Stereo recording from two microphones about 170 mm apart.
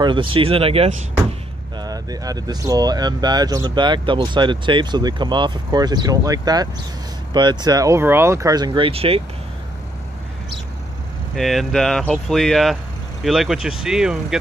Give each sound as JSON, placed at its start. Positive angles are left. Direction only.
{"t": 0.0, "sound": "speech", "side_deg": -30}
{"t": 1.8, "sound": "speech", "side_deg": -20}
{"t": 11.3, "sound": "speech", "side_deg": 0}